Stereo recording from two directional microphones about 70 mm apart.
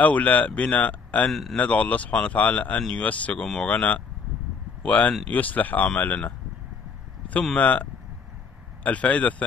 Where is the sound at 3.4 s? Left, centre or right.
Centre.